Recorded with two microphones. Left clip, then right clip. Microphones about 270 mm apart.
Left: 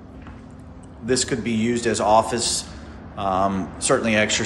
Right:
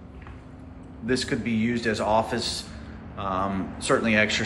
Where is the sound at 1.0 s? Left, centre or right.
Centre.